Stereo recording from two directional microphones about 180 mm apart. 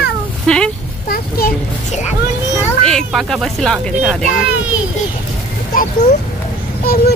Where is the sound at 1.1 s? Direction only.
55° left (ahead or behind).